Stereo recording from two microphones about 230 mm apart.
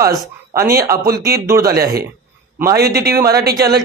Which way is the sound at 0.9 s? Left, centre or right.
Right.